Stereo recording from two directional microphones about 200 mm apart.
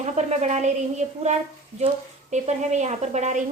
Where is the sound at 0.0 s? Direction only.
35° right (ahead or behind).